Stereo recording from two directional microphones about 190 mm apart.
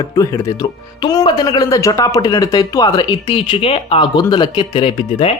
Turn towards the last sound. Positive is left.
turn(degrees=30)  # may be behind; listen again after turning